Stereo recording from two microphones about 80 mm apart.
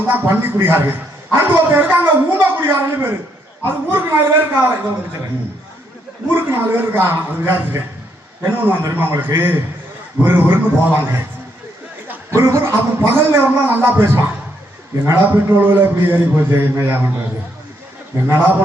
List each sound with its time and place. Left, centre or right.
0.1 s a man's voice: right
6.3 s a man's voice: right
12.3 s a man's voice: right
18.3 s a man's voice: right